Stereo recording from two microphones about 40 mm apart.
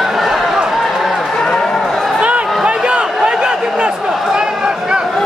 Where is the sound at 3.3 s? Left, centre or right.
Centre.